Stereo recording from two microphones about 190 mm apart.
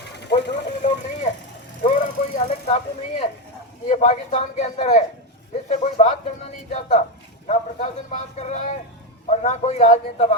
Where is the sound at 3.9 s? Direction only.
35° left (ahead or behind).